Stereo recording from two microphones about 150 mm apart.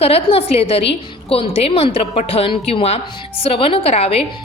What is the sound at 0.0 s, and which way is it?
A woman's voice, 40° left (ahead or behind).